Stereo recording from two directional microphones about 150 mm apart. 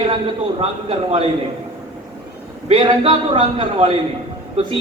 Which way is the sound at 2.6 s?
40° right (ahead or behind).